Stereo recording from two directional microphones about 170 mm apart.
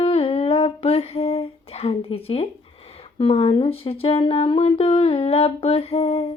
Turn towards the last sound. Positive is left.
turn(degrees=35)  # may be behind; listen again after turning